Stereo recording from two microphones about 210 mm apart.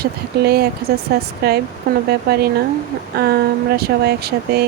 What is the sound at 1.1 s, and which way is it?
A woman's voice, 50° right (ahead or behind).